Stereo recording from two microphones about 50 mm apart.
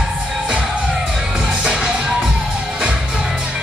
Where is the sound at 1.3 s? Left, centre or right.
Centre.